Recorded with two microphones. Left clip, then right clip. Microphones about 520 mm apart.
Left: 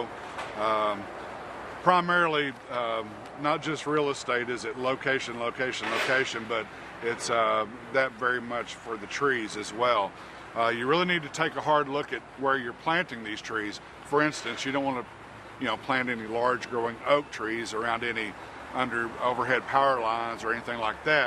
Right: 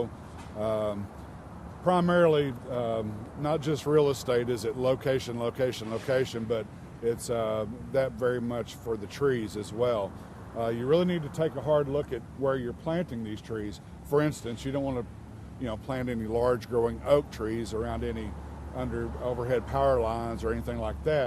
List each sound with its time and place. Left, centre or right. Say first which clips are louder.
0.6 s speech: left 3 dB; right
9.1 s speech: left 3 dB; right
10.6 s speech: left 1 dB; right